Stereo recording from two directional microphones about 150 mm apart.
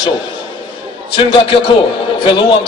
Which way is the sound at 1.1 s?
35° left (ahead or behind).